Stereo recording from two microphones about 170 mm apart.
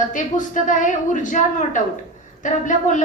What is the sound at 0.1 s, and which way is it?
A woman's voice, 50° left (ahead or behind).